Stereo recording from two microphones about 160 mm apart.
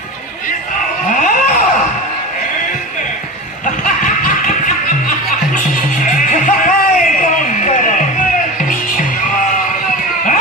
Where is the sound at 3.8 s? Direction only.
55° left (ahead or behind).